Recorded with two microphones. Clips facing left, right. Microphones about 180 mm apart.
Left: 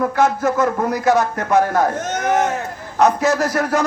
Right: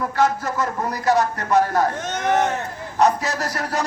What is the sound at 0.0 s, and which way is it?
A man's voice, 50° left (ahead or behind).